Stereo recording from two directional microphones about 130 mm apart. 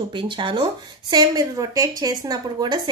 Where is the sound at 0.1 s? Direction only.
40° right (ahead or behind).